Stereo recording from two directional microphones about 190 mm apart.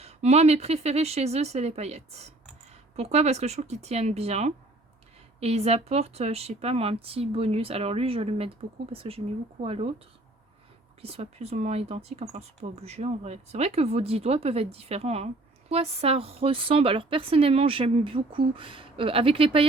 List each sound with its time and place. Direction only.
0.0 s speech: 35° right (ahead or behind)
11.0 s speech: 35° right (ahead or behind)